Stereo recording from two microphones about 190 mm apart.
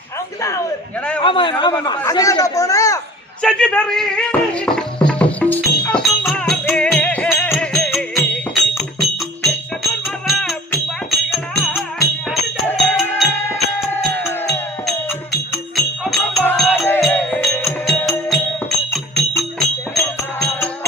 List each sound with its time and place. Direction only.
1.2 s speech: 25° left (ahead or behind)
3.4 s music: 5° left (ahead or behind)
12.3 s music: centre (ahead or behind)
13.2 s music: 15° left (ahead or behind)
14.8 s music: centre (ahead or behind)
19.4 s music: centre (ahead or behind)